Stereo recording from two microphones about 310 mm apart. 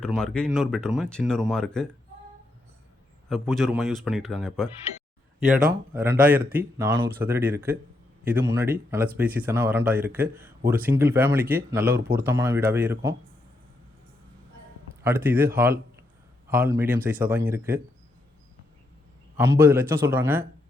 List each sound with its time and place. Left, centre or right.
0.0 s speech: centre
3.2 s speech: centre
5.9 s speech: centre
6.1 s a man's voice: right
6.7 s speech: centre
15.0 s speech: centre
19.4 s speech: centre